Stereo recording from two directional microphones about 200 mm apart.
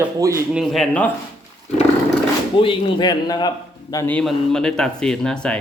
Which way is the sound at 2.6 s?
20° left (ahead or behind).